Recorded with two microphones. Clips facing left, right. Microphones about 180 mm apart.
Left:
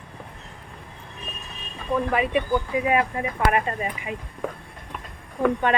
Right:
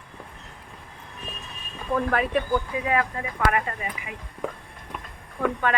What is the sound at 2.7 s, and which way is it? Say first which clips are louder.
Speech: left 3 dB; 20° left (ahead or behind).